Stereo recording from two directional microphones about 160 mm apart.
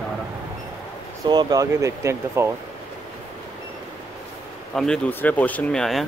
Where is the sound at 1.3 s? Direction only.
25° right (ahead or behind).